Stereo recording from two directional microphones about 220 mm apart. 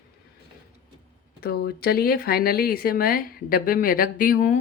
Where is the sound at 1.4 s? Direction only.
45° left (ahead or behind).